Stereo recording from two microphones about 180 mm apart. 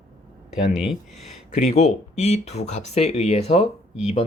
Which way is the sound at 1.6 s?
35° left (ahead or behind).